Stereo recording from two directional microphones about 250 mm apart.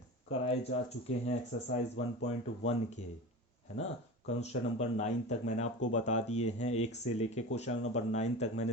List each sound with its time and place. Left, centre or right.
0.3 s speech: left
4.4 s speech: left